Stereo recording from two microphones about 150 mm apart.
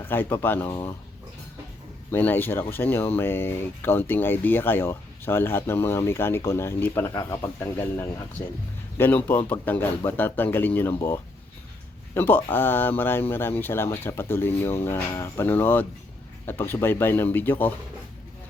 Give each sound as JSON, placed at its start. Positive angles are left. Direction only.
{"t": 0.0, "sound": "speech", "side_deg": 15}
{"t": 2.0, "sound": "speech", "side_deg": 15}
{"t": 12.1, "sound": "speech", "side_deg": 15}